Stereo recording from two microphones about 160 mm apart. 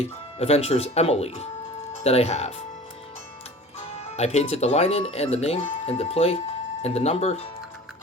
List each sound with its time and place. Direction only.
0.0 s speech: 40° left (ahead or behind)
4.2 s speech: 40° left (ahead or behind)